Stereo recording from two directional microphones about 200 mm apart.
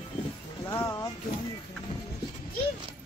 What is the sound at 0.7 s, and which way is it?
Speech, 15° left (ahead or behind).